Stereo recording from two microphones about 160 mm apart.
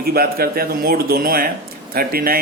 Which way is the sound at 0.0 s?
70° right (ahead or behind).